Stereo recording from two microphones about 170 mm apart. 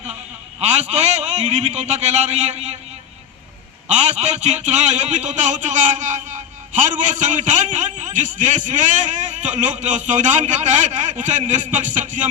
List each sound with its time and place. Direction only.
0.6 s a man's voice: 40° right (ahead or behind)
3.8 s a man's voice: 40° right (ahead or behind)